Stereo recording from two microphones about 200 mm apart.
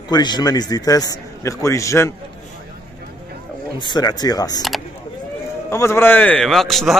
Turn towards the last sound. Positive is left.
turn(degrees=0)  # may be behind; listen again after turning